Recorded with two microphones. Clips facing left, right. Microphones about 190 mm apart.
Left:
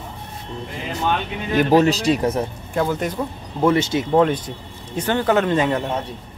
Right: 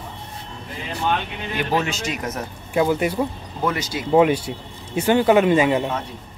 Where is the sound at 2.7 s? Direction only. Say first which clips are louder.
Right 3 dB; 10° right (ahead or behind).